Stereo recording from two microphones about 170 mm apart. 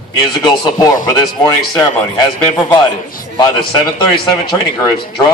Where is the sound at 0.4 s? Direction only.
25° left (ahead or behind).